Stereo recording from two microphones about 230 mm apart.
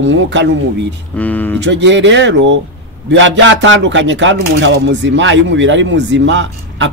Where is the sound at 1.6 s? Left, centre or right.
Right.